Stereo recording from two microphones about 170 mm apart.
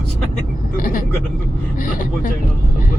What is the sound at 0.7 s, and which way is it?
Speech, 50° left (ahead or behind).